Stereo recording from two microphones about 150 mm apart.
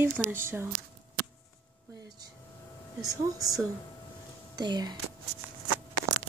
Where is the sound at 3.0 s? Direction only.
25° right (ahead or behind).